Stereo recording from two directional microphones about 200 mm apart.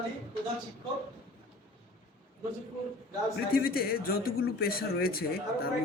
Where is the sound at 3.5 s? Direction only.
50° left (ahead or behind).